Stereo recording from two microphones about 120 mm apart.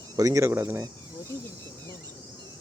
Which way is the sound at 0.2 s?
30° right (ahead or behind).